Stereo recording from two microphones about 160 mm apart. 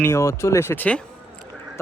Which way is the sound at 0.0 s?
20° left (ahead or behind).